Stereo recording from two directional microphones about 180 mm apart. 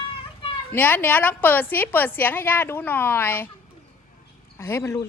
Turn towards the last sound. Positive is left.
turn(degrees=15)  # may be behind; listen again after turning